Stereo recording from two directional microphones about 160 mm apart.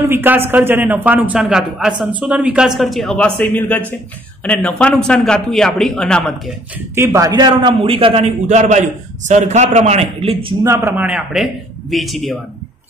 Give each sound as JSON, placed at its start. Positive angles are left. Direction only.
{"t": 0.1, "sound": "a man's voice", "side_deg": -15}
{"t": 7.0, "sound": "a man's voice", "side_deg": -20}
{"t": 10.6, "sound": "a man's voice", "side_deg": -15}